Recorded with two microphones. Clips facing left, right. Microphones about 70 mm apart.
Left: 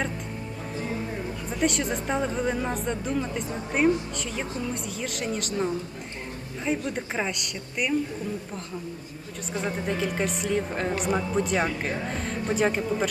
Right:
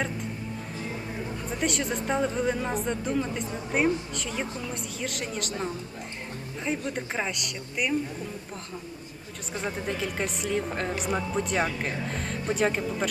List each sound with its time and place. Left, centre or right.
1.5 s speech: centre
9.5 s speech: centre